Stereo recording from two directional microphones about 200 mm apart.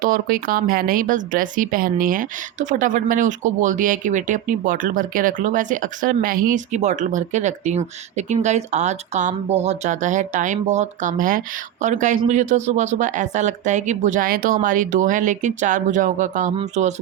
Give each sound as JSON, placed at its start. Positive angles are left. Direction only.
{"t": 0.0, "sound": "a woman's voice", "side_deg": -45}